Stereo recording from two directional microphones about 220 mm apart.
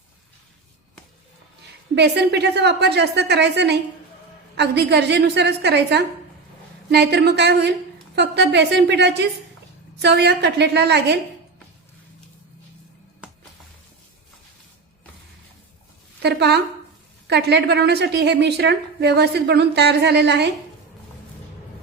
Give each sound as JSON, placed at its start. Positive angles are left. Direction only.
{"t": 2.0, "sound": "a woman's voice", "side_deg": -50}
{"t": 16.2, "sound": "a woman's voice", "side_deg": -50}